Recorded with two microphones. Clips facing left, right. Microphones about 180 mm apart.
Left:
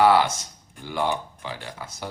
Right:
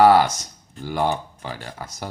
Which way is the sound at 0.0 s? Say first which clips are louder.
Right 4 dB; 40° right (ahead or behind).